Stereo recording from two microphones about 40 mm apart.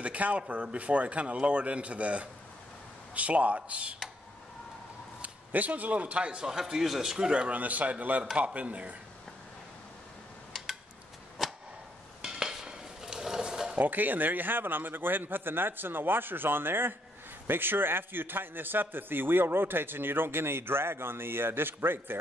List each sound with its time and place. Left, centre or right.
0.0 s a man's voice: right
5.2 s a man's voice: right
6.4 s a man's voice: centre
7.5 s a man's voice: right
11.4 s a sound: centre
12.2 s stir: centre
13.7 s a man's voice: right